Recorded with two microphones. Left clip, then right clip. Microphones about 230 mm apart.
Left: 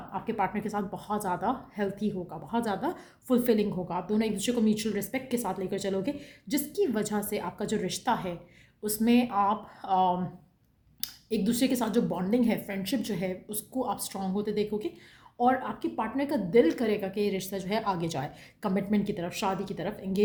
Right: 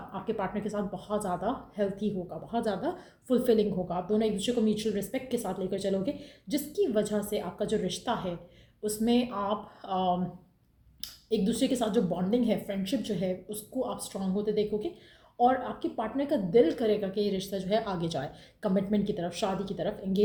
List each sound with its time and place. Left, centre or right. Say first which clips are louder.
0.1 s a woman's voice: left 3 dB; left